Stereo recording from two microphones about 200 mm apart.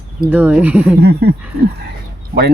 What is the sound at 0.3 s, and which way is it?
Speech, 5° right (ahead or behind).